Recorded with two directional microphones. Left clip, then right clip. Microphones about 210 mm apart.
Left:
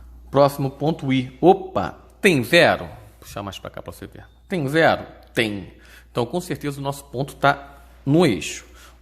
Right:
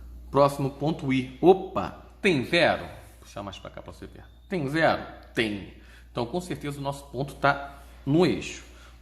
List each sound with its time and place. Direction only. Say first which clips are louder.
0.3 s a man's voice: left 5 dB; 35° left (ahead or behind)